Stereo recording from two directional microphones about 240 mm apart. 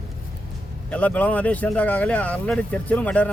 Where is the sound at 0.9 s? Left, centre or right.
Centre.